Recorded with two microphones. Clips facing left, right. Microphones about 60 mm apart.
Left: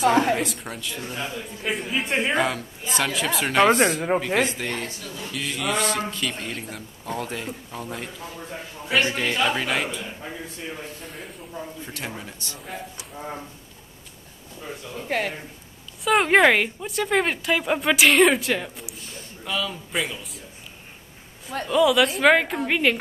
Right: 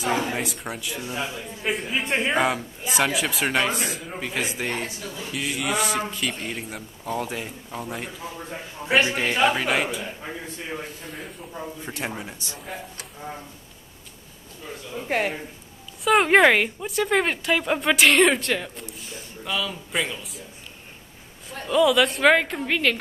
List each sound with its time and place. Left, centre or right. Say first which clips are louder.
0.0 s a woman's voice: left 6 dB; left
0.4 s a man's voice: left 1 dB; centre
3.8 s speech: left 11 dB; left
4.4 s a man's voice: left 3 dB; centre
8.8 s a man's voice: right 2 dB; centre
9.6 s a woman's voice: right 2 dB; centre
11.8 s speech: right 3 dB; right
15.0 s a man's voice: right 2 dB; centre
16.0 s a woman's voice: right 1 dB; centre
21.6 s a woman's voice: even; centre